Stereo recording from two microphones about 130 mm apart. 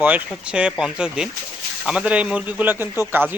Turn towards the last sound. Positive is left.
turn(degrees=-15)  # may be behind; listen again after turning